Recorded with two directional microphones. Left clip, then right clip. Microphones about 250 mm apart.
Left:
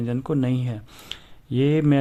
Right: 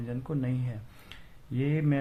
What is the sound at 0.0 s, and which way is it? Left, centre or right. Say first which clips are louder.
Speech: left 10 dB; left.